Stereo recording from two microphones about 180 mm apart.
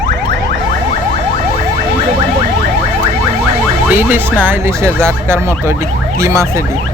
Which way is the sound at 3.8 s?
10° right (ahead or behind).